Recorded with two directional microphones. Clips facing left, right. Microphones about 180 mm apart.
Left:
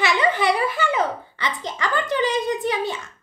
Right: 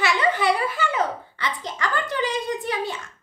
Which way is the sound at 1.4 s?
20° left (ahead or behind).